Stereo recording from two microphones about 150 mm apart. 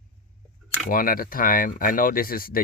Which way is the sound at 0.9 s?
70° left (ahead or behind).